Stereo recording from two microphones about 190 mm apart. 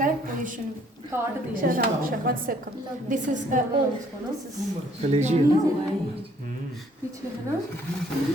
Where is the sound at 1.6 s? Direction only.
50° right (ahead or behind).